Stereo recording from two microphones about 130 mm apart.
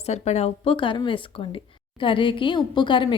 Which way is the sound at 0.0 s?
60° left (ahead or behind).